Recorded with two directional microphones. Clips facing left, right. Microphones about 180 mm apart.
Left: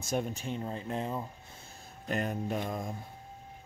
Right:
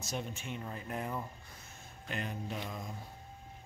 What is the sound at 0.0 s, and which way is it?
Speech, 50° left (ahead or behind).